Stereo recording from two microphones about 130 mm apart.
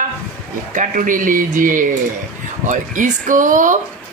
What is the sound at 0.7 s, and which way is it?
A woman's voice, 85° right.